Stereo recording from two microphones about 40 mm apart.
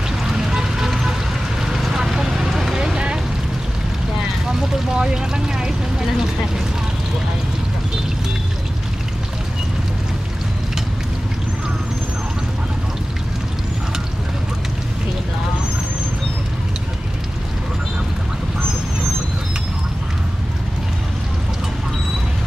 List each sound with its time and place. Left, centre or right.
0.2 s music: centre
0.8 s vehicle: centre
4.5 s vehicle: centre